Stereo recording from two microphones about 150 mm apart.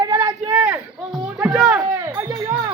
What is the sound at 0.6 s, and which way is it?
Speech, 10° right (ahead or behind).